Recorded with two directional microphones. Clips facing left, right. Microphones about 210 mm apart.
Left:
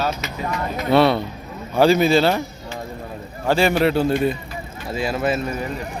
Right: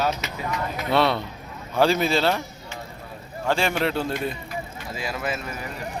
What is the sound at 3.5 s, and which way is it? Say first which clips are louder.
Speech: left 6 dB; 5° left (ahead or behind).